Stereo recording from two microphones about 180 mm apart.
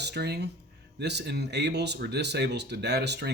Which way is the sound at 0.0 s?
65° right (ahead or behind).